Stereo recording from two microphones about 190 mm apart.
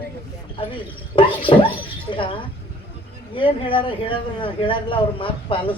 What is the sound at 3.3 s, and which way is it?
Speech, 25° left (ahead or behind).